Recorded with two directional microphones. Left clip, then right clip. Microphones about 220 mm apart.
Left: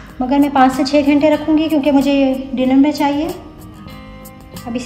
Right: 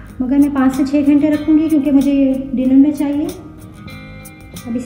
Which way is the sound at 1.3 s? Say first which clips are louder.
Even; 50° left (ahead or behind).